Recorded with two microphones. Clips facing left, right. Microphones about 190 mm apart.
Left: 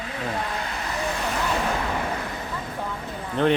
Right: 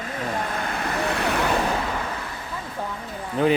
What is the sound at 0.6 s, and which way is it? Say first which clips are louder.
Vehicle: right 3 dB; 65° right (ahead or behind).